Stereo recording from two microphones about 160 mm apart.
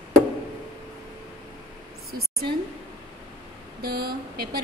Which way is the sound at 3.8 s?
75° right (ahead or behind).